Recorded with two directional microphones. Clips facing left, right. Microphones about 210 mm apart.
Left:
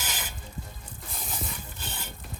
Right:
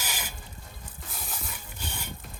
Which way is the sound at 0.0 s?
10° right (ahead or behind).